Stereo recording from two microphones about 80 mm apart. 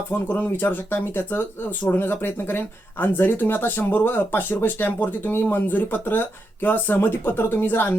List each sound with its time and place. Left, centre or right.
0.1 s speech: left